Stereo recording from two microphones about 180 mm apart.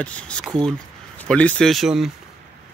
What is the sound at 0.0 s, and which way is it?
Speech, 5° left (ahead or behind).